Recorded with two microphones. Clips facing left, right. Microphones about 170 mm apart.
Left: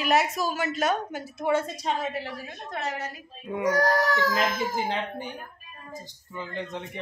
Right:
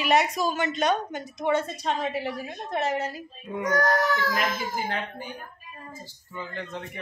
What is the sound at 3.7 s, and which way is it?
Speech, 35° left (ahead or behind).